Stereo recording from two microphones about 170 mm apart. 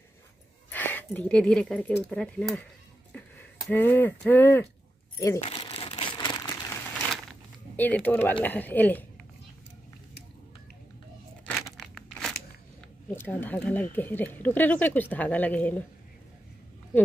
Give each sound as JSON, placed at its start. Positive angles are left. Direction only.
{"t": 0.7, "sound": "speech", "side_deg": 10}
{"t": 3.7, "sound": "speech", "side_deg": 10}
{"t": 5.4, "sound": "crumpling", "side_deg": 30}
{"t": 7.7, "sound": "speech", "side_deg": 10}
{"t": 11.4, "sound": "crumpling", "side_deg": 5}
{"t": 13.1, "sound": "speech", "side_deg": 10}